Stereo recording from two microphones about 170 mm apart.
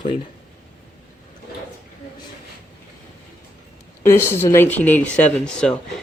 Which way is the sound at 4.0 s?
15° left (ahead or behind).